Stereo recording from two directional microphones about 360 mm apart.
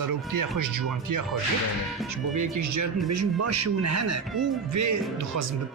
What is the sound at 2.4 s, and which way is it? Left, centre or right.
A man's voice, right.